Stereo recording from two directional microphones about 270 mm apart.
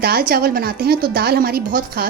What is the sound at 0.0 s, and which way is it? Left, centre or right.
Speech, right.